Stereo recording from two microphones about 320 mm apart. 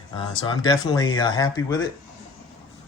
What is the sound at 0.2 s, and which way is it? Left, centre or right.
Speech, centre.